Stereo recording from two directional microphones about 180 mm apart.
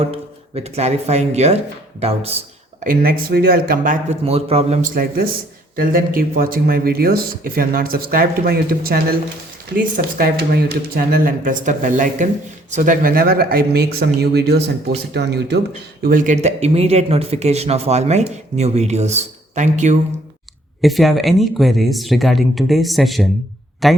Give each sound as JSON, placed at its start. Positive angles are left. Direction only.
{"t": 0.0, "sound": "speech", "side_deg": -35}
{"t": 2.8, "sound": "speech", "side_deg": -50}
{"t": 4.1, "sound": "speech", "side_deg": -35}
{"t": 4.9, "sound": "speech", "side_deg": -55}
{"t": 16.0, "sound": "speech", "side_deg": -50}
{"t": 20.8, "sound": "speech", "side_deg": 0}